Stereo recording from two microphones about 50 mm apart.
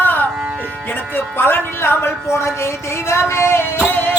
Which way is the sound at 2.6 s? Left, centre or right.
Left.